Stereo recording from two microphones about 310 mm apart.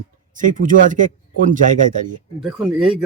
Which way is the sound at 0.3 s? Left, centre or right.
Right.